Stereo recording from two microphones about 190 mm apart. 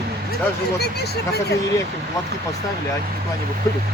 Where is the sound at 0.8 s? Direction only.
55° left (ahead or behind).